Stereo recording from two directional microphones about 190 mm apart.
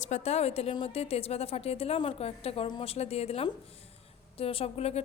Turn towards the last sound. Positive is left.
turn(degrees=35)  # may be behind; listen again after turning